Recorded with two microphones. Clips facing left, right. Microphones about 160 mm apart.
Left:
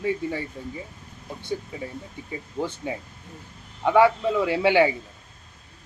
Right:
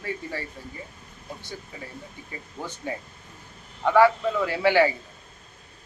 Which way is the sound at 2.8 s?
15° left (ahead or behind).